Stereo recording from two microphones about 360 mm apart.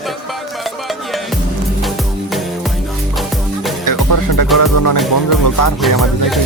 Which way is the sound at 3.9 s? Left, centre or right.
Left.